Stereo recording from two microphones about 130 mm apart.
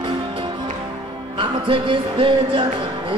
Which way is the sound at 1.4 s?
40° right (ahead or behind).